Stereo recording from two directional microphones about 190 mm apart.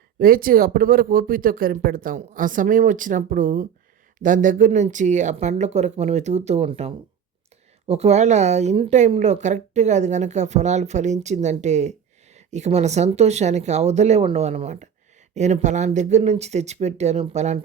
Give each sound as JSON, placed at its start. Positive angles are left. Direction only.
{"t": 0.2, "sound": "speech", "side_deg": -50}